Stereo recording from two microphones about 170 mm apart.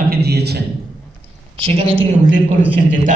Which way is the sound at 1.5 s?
35° right (ahead or behind).